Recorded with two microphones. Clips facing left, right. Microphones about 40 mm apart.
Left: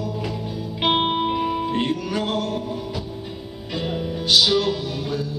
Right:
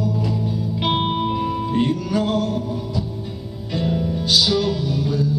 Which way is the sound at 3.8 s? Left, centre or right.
Left.